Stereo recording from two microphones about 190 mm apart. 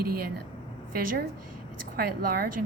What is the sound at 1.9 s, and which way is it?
Speech, 50° right (ahead or behind).